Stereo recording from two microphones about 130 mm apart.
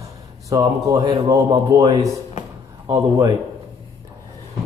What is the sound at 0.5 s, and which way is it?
Speech, 30° right (ahead or behind).